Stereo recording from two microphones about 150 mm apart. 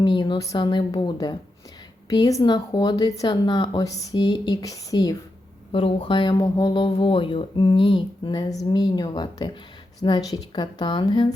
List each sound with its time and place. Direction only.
0.0 s speech: 30° left (ahead or behind)
5.7 s speech: 35° left (ahead or behind)